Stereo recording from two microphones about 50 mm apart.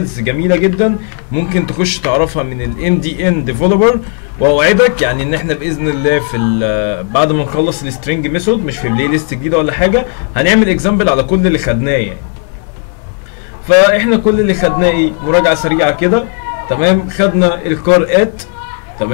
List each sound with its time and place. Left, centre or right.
0.0 s speech: centre
11.5 s speech: centre
13.8 s speech: centre